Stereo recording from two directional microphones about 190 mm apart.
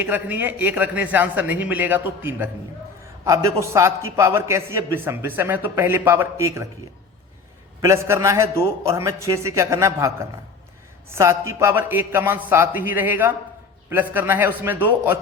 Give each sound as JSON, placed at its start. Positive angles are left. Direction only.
{"t": 0.0, "sound": "a man's voice", "side_deg": -10}
{"t": 7.8, "sound": "a man's voice", "side_deg": -15}
{"t": 11.1, "sound": "a man's voice", "side_deg": -15}